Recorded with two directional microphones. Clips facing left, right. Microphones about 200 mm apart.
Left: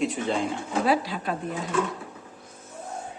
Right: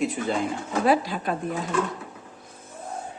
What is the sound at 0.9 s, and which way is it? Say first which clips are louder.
Speech: right 3 dB; 45° right (ahead or behind).